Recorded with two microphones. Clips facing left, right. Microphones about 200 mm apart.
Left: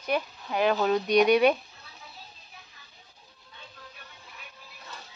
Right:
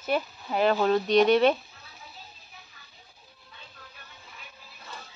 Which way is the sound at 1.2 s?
15° left (ahead or behind).